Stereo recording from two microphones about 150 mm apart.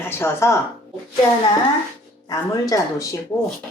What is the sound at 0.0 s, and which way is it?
Speech, 15° left (ahead or behind).